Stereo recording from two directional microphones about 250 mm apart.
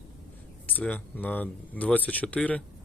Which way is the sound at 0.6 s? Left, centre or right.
Centre.